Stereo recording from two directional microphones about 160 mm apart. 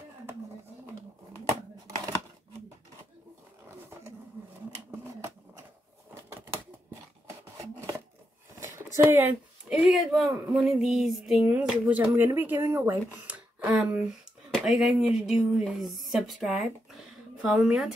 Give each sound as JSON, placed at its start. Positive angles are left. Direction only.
{"t": 7.2, "sound": "a sound", "side_deg": -20}
{"t": 9.7, "sound": "speech", "side_deg": 0}
{"t": 12.2, "sound": "speech", "side_deg": -15}